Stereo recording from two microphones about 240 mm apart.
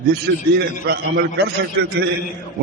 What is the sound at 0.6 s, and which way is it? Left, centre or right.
A man's voice, right.